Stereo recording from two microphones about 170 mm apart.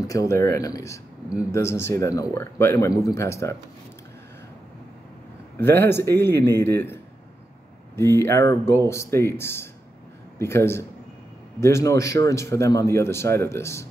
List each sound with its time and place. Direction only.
0.0 s a man's voice: 20° left (ahead or behind)
5.6 s a man's voice: 15° left (ahead or behind)
7.9 s a man's voice: 15° left (ahead or behind)